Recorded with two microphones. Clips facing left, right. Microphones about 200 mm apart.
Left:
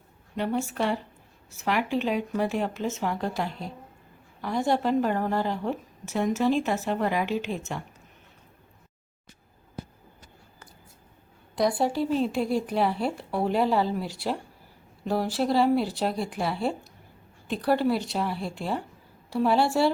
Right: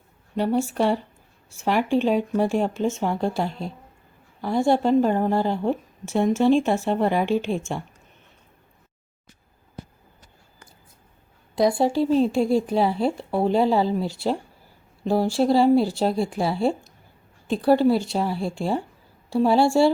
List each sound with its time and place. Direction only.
0.3 s a woman's voice: 35° right (ahead or behind)
11.7 s a woman's voice: 25° right (ahead or behind)